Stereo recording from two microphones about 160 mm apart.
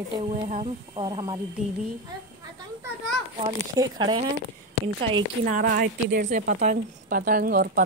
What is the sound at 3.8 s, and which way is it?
Speech, 25° right (ahead or behind).